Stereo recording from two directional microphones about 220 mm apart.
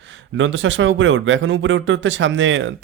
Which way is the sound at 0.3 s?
55° right (ahead or behind).